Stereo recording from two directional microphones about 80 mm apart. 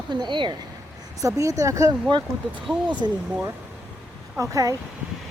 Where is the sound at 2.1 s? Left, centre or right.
Right.